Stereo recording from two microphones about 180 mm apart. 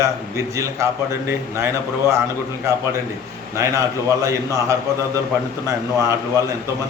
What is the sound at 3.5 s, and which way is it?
A man's voice, 15° right (ahead or behind).